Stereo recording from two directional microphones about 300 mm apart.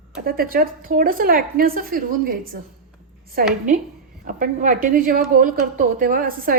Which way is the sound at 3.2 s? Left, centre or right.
Right.